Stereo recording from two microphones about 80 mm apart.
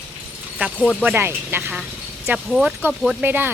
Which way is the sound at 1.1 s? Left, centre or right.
Right.